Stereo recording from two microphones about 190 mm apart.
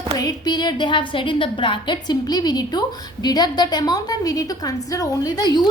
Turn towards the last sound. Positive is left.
turn(degrees=20)  # may be behind; listen again after turning